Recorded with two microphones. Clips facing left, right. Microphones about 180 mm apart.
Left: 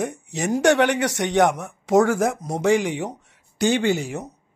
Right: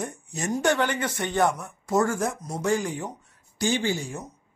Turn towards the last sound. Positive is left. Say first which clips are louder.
# left 6 dB
turn(degrees=65)  # may be behind; listen again after turning